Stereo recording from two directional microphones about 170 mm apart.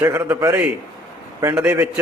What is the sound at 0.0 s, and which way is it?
A man's voice, 15° right (ahead or behind).